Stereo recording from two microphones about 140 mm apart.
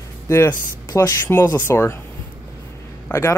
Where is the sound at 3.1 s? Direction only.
20° left (ahead or behind).